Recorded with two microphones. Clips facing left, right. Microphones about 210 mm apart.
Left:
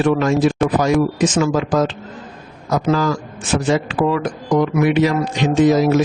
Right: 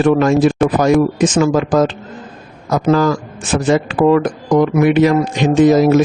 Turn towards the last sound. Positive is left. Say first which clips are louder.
# right 4 dB
turn(degrees=-50)  # may be behind; listen again after turning